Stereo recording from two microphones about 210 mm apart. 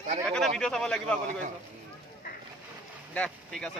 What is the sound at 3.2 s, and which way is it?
Speech, 5° left (ahead or behind).